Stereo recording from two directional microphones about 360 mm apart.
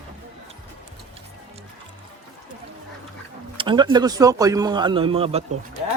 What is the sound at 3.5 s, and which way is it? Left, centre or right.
Speech, centre.